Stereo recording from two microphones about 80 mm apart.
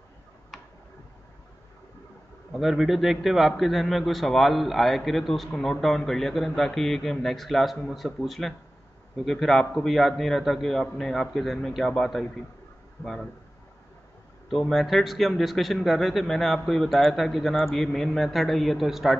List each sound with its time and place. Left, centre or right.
2.5 s a man's voice: centre
14.7 s a man's voice: centre